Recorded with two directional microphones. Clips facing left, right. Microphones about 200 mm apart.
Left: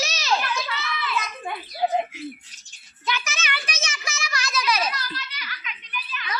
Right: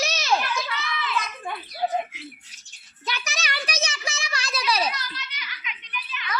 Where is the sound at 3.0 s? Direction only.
35° right (ahead or behind).